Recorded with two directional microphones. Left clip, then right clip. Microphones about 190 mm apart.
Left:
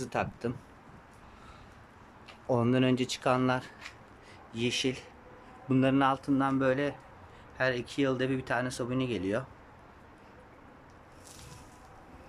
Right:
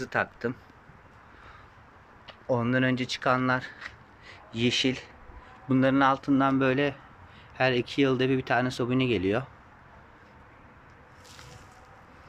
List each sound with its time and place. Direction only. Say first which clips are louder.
0.0 s speech: right 4 dB; 15° left (ahead or behind)
2.5 s speech: right 2 dB; 15° left (ahead or behind); by 9.5 s centre (ahead or behind)